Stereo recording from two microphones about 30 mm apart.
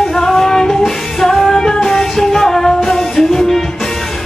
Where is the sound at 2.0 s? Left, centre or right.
Centre.